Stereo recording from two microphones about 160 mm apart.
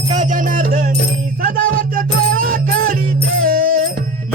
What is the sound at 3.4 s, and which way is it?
Music, 65° right (ahead or behind).